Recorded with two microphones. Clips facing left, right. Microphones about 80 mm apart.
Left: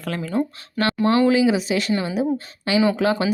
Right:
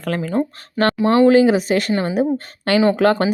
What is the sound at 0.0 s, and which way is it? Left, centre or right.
Speech, right.